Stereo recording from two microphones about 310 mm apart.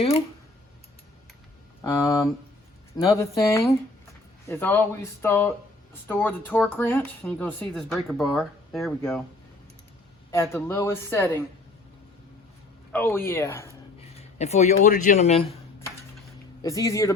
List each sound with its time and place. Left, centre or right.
1.8 s speech: centre
10.3 s speech: centre
12.9 s speech: centre
14.3 s speech: left
16.6 s speech: centre